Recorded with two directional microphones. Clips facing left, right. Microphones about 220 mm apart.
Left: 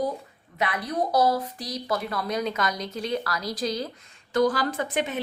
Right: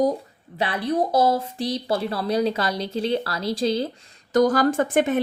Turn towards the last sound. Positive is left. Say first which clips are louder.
# right 8 dB
turn(degrees=-50)  # may be behind; listen again after turning